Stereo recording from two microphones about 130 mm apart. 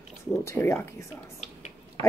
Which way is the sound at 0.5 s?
15° left (ahead or behind).